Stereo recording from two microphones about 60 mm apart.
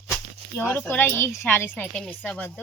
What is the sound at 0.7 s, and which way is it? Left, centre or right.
Speech, left.